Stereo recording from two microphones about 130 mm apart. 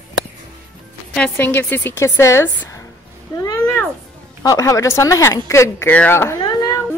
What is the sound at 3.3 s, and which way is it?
Cat, 25° left (ahead or behind).